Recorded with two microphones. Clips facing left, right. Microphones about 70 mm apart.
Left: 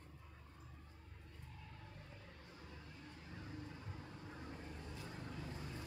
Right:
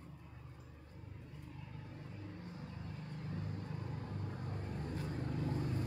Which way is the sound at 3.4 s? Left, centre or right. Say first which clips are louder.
Right 3 dB; right.